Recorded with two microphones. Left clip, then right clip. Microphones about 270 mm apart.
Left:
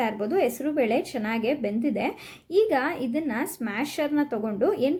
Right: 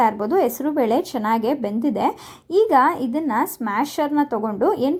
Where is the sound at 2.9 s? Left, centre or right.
Centre.